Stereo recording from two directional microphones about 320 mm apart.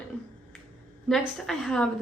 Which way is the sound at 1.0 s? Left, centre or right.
Centre.